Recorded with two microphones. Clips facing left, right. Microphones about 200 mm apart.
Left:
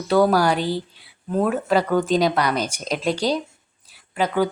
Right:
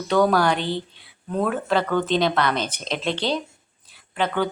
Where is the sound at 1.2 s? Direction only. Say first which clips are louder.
Left 3 dB; 10° left (ahead or behind).